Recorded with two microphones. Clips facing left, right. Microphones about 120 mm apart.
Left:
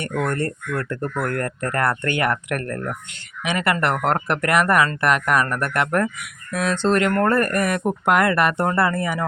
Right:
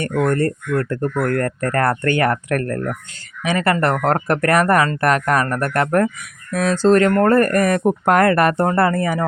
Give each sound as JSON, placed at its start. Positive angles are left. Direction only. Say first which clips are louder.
{"t": 0.0, "sound": "speech", "louder": "right 5 dB", "side_deg": -40}